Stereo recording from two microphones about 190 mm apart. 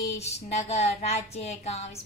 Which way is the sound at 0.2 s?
35° left (ahead or behind).